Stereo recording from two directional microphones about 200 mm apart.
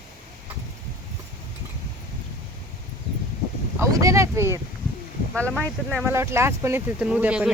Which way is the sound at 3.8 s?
15° right (ahead or behind).